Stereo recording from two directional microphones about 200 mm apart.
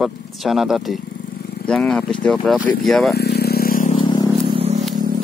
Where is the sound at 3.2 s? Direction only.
55° left (ahead or behind).